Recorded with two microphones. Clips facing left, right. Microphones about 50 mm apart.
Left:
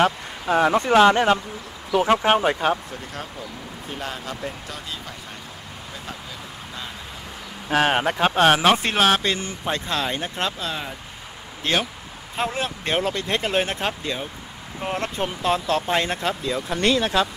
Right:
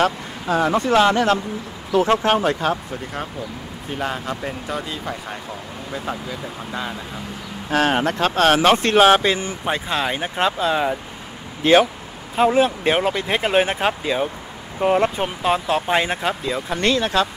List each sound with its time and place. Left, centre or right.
0.0 s speech: centre
1.9 s speech: centre
4.0 s speech: right
7.7 s speech: centre
9.0 s speech: centre